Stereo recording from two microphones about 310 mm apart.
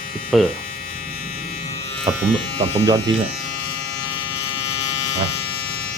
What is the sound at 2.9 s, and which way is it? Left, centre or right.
Speech, centre.